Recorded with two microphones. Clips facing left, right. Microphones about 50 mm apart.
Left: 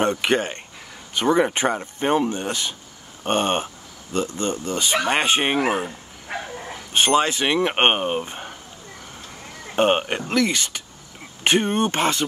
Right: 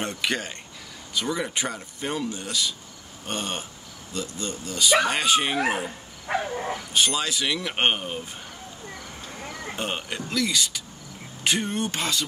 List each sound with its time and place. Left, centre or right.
0.0 s speech: left
6.9 s speech: left
9.8 s speech: left